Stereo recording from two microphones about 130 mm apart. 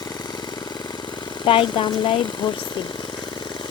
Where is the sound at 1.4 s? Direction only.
40° left (ahead or behind).